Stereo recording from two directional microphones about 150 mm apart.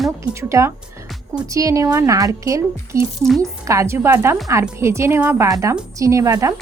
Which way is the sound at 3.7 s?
20° right (ahead or behind).